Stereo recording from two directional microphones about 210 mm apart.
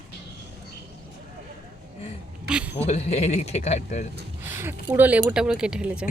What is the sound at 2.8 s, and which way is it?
Speech, 30° left (ahead or behind).